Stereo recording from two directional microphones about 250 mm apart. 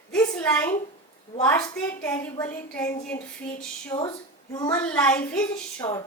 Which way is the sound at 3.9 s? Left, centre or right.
Centre.